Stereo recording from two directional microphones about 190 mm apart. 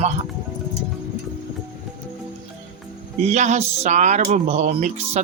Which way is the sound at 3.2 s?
35° right (ahead or behind).